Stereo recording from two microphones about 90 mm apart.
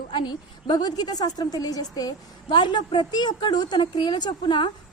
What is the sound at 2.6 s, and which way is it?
A woman's voice, 60° left (ahead or behind).